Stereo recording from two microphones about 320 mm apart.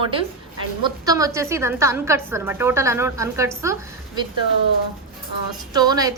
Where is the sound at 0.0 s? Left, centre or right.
Centre.